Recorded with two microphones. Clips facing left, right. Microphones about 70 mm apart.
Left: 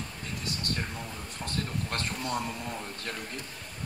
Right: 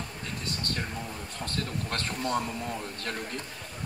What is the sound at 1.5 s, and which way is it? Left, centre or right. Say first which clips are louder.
Speech: even; right.